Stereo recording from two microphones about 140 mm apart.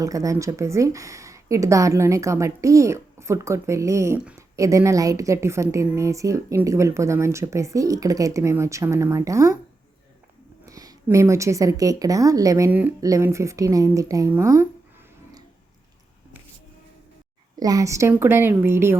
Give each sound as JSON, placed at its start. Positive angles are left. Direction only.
{"t": 0.0, "sound": "a woman's voice", "side_deg": -25}
{"t": 10.7, "sound": "a woman's voice", "side_deg": -25}
{"t": 17.6, "sound": "a woman's voice", "side_deg": -25}